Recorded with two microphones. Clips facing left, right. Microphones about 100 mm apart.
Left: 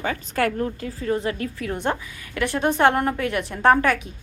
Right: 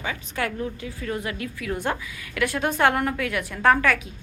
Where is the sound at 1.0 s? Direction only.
30° left (ahead or behind).